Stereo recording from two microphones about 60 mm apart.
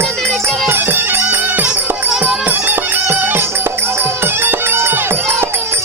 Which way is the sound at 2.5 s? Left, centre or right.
Right.